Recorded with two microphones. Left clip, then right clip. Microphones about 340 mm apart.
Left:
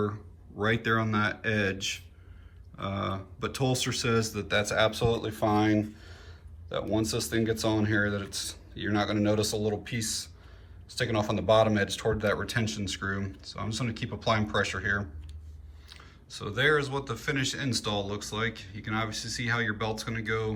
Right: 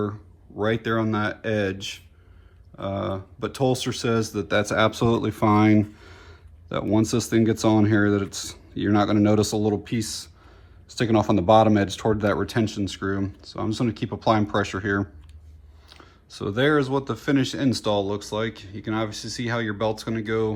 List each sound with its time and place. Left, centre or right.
0.0 s speech: centre